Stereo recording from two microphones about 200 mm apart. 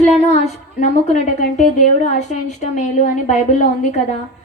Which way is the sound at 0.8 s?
35° left (ahead or behind).